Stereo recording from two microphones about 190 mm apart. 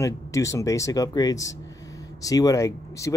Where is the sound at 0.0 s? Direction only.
15° left (ahead or behind).